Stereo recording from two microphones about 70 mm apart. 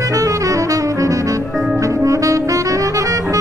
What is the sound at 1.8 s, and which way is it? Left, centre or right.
Saxophone, right.